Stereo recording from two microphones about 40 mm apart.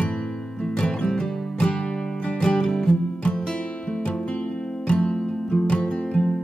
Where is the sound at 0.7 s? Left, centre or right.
Left.